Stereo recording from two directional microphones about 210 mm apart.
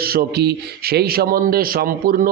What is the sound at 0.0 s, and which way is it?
Speech, 45° right (ahead or behind).